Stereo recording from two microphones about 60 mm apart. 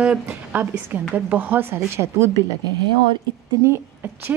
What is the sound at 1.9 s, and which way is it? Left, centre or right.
Speech, right.